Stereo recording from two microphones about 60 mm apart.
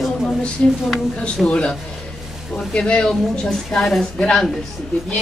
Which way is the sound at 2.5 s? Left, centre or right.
Centre.